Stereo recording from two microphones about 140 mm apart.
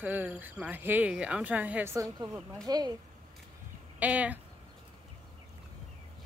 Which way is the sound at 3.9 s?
10° right (ahead or behind).